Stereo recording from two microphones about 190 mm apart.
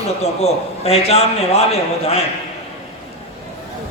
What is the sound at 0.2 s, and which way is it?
A man's voice, 35° left (ahead or behind).